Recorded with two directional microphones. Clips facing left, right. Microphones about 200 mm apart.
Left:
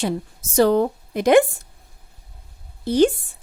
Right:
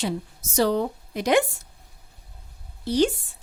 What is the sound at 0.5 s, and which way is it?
Speech, 55° left (ahead or behind).